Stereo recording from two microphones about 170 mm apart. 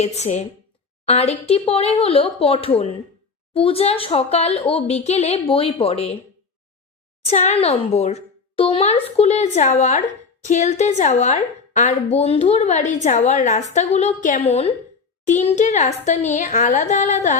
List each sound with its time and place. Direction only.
0.0 s speech: 40° left (ahead or behind)
7.3 s a woman's voice: 40° left (ahead or behind)